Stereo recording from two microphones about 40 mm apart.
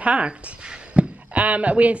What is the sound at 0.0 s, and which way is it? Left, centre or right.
A woman's voice, right.